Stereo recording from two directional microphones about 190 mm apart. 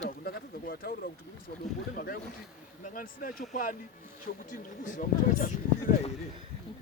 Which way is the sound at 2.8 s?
45° left (ahead or behind).